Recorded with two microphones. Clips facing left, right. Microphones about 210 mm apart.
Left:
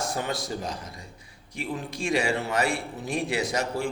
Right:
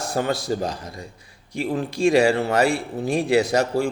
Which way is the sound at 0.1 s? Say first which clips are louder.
Right 7 dB; 30° right (ahead or behind).